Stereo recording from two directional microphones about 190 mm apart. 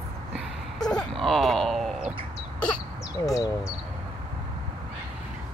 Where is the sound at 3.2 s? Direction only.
20° left (ahead or behind).